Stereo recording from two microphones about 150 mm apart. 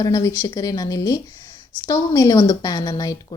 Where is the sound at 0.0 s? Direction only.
20° left (ahead or behind).